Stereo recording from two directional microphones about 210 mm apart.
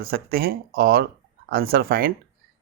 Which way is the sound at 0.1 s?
45° right (ahead or behind).